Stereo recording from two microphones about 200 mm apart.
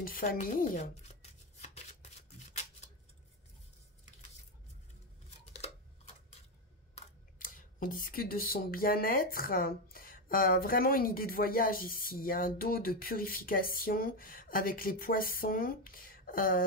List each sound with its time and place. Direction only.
0.0 s speech: 45° left (ahead or behind)
5.4 s a sound: 30° left (ahead or behind)
7.0 s speech: 40° left (ahead or behind)